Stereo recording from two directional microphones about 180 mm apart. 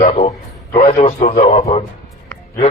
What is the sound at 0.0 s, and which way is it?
A man's voice, 40° left (ahead or behind).